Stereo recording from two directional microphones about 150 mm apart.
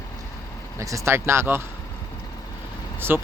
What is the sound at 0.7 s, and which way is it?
Speech, 20° right (ahead or behind).